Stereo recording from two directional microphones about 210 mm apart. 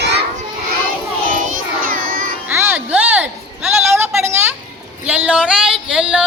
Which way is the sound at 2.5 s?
10° right (ahead or behind).